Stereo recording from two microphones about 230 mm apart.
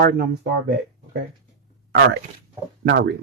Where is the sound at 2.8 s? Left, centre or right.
Right.